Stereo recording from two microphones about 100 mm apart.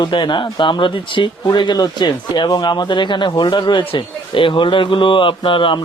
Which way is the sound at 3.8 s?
65° left (ahead or behind).